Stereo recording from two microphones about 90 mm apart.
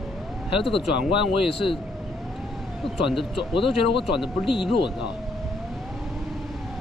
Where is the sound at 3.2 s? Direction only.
75° left (ahead or behind).